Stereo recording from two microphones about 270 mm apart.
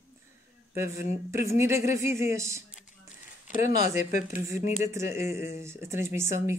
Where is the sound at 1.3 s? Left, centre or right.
Centre.